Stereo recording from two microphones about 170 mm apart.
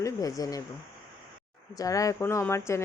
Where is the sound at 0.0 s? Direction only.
20° left (ahead or behind).